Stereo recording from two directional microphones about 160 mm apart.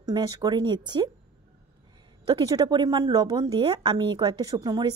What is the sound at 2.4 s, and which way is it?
A woman's voice, 25° right (ahead or behind).